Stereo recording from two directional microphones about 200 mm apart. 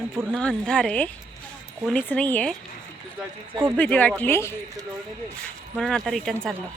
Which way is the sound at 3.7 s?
5° left (ahead or behind).